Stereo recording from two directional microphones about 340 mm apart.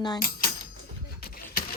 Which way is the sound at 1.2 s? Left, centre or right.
Left.